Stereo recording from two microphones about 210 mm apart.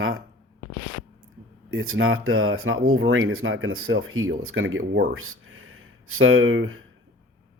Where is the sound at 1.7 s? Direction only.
70° right (ahead or behind).